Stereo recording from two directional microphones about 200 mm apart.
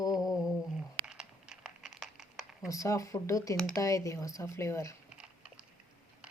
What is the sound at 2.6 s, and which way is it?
Speech, 15° left (ahead or behind).